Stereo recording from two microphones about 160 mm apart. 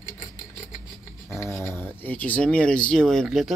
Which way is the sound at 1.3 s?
15° left (ahead or behind).